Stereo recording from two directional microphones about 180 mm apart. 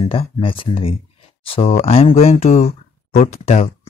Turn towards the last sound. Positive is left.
turn(degrees=35)  # may be behind; listen again after turning